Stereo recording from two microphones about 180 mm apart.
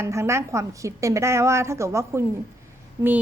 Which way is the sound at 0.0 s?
15° right (ahead or behind).